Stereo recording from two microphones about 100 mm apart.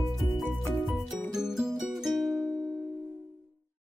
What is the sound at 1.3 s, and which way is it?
Music, 5° right (ahead or behind).